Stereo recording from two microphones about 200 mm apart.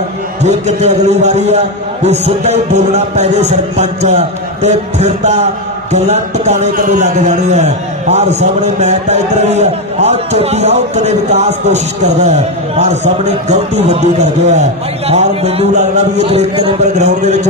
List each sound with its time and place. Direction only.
0.5 s a man's voice: 35° right (ahead or behind)